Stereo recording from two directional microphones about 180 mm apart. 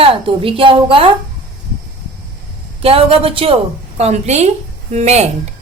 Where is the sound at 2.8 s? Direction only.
30° right (ahead or behind).